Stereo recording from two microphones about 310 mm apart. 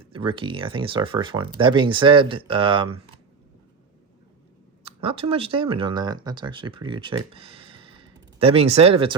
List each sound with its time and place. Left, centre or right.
0.0 s speech: centre
4.8 s speech: centre